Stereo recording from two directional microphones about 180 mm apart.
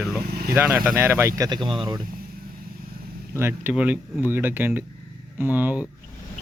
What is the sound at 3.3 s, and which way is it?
Speech, 10° right (ahead or behind).